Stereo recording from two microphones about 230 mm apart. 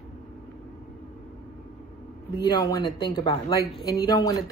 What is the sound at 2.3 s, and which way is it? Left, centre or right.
A woman's voice, centre.